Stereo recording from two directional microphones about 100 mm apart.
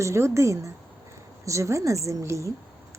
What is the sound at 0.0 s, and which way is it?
A woman's voice, 30° right (ahead or behind).